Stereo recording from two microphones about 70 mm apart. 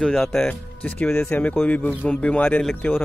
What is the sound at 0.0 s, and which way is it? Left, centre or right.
Speech, centre.